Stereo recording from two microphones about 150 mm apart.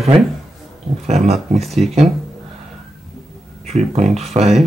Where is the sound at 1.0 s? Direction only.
45° right (ahead or behind).